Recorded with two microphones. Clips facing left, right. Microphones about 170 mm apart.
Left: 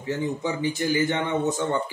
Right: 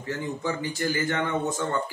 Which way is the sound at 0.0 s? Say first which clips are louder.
Left 3 dB; 20° left (ahead or behind).